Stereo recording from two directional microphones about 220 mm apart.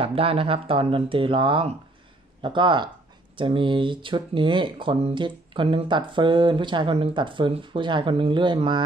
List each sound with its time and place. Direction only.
0.0 s speech: 25° right (ahead or behind)